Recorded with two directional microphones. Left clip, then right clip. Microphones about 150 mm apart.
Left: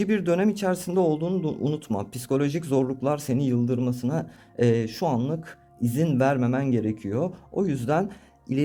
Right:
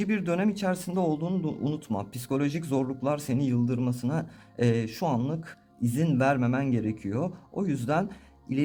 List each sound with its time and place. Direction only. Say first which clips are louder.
0.0 s speech: left 5 dB; 30° left (ahead or behind)